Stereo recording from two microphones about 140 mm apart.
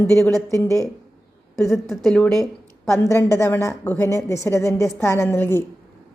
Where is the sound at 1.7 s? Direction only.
Centre (ahead or behind).